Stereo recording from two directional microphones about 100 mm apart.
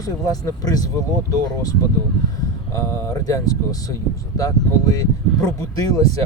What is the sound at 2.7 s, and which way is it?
Speech, 30° left (ahead or behind).